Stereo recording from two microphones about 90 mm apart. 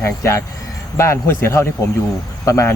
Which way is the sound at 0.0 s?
30° left (ahead or behind).